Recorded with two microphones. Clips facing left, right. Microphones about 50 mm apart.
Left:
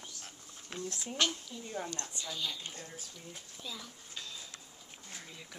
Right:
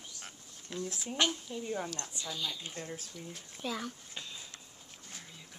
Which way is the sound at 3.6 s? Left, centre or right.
Right.